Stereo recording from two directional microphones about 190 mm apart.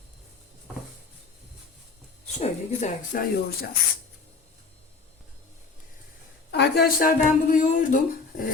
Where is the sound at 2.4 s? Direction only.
35° left (ahead or behind); by 3.7 s 50° left (ahead or behind).